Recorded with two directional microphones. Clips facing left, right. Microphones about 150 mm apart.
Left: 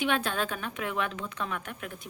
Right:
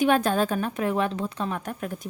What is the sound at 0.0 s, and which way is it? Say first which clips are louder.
A woman's voice: right 8 dB; 40° right (ahead or behind).